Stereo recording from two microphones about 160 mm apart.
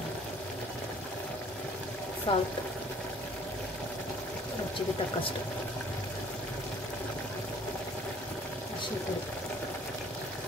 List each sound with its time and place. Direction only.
2.3 s speech: 30° left (ahead or behind)